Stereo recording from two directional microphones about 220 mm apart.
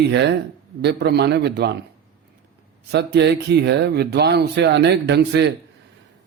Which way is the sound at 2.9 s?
50° right (ahead or behind).